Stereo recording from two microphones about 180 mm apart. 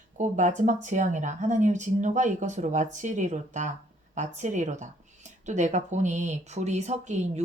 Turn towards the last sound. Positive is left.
turn(degrees=-40)  # may be behind; listen again after turning